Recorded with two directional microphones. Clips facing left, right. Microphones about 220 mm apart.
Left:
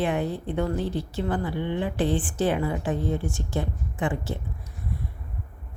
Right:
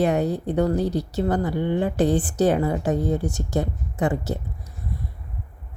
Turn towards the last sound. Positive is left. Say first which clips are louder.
# right 4 dB
turn(degrees=-40)  # may be behind; listen again after turning